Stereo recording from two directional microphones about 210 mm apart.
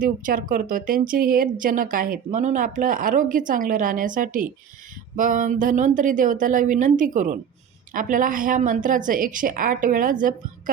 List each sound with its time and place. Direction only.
0.0 s speech: 40° right (ahead or behind)